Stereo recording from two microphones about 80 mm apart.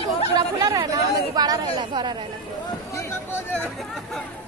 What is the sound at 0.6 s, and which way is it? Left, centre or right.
Chatter, right.